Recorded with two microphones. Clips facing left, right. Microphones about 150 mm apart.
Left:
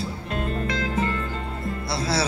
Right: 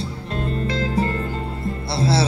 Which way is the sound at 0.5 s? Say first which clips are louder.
Right 5 dB; 30° right (ahead or behind).